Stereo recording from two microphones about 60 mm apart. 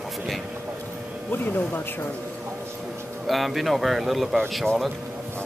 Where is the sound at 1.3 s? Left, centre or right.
Left.